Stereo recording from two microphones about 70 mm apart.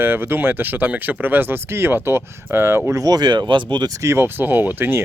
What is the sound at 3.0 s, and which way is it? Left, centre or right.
Speech, right.